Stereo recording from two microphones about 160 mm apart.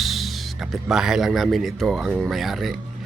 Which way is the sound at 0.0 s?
Centre (ahead or behind).